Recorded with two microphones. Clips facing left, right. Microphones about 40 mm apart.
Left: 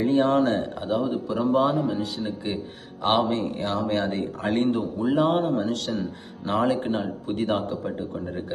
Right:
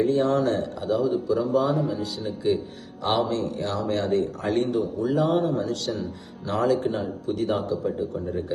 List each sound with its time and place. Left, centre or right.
0.0 s speech: left